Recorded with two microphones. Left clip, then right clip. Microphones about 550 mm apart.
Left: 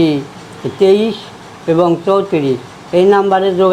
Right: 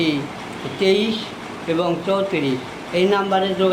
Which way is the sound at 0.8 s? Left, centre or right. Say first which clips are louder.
Left 7 dB; left.